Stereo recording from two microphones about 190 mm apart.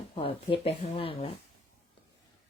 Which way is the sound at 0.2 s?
30° left (ahead or behind).